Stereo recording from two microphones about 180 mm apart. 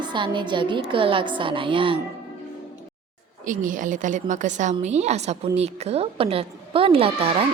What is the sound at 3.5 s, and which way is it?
A woman's voice, 45° right (ahead or behind).